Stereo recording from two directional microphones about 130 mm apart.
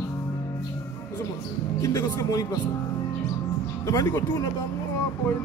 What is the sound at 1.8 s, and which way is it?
Speech, 25° left (ahead or behind).